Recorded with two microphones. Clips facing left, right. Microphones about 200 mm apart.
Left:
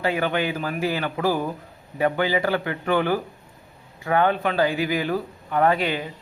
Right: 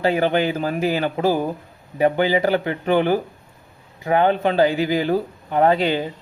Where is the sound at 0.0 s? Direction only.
30° right (ahead or behind).